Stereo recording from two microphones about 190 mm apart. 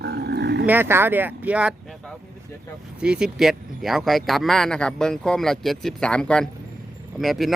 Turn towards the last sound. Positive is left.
turn(degrees=0)  # may be behind; listen again after turning